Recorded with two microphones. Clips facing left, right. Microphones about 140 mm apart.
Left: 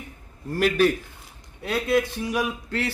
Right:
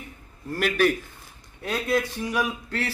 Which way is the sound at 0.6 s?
30° left (ahead or behind).